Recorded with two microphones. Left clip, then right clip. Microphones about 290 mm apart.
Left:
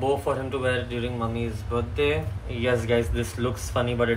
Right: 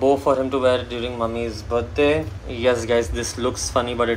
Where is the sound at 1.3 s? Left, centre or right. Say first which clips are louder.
Right 6 dB; centre.